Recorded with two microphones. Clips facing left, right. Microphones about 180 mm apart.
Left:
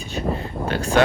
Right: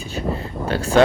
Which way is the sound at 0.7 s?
30° right (ahead or behind).